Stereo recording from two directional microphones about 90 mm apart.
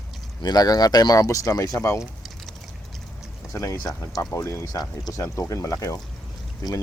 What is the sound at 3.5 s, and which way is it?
Speech, 40° left (ahead or behind).